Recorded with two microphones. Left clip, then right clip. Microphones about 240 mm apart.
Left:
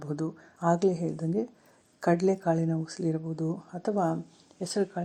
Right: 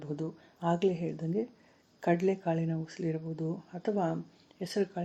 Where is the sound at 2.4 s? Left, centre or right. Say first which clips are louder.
Left 5 dB; left.